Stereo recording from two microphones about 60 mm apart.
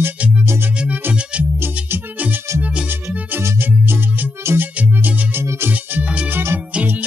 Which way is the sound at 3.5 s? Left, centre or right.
Right.